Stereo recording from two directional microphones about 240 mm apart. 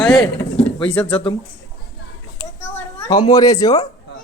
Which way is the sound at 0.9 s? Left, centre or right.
Centre.